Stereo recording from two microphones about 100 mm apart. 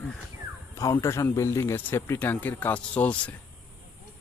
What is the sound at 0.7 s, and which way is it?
Speech, 30° left (ahead or behind).